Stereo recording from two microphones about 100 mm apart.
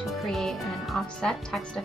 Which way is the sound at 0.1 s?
Centre (ahead or behind).